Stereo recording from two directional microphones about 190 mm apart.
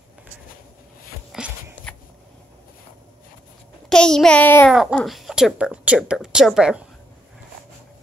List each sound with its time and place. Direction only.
1.3 s a sound: centre (ahead or behind)
3.9 s child singing: 5° left (ahead or behind)
4.9 s a woman's voice: centre (ahead or behind)